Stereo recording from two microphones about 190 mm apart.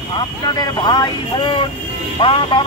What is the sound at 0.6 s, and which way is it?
Speech, 20° left (ahead or behind).